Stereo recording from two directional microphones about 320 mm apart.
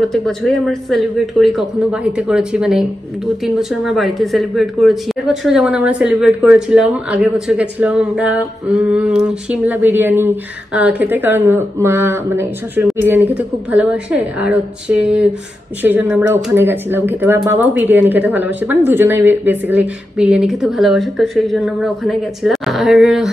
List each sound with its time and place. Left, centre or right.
0.1 s speech: centre